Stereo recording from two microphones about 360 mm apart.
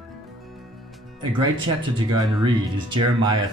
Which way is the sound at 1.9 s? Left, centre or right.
Centre.